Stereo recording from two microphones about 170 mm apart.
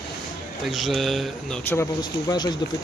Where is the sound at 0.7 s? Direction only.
Centre (ahead or behind).